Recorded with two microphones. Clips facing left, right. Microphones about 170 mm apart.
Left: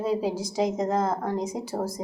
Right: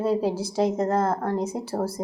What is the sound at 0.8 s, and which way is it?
Speech, 5° right (ahead or behind).